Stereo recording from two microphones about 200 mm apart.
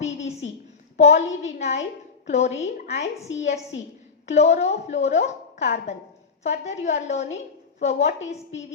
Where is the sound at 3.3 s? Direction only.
75° left (ahead or behind).